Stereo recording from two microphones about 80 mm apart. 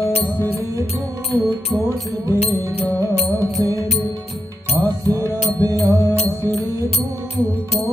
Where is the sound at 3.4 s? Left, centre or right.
Right.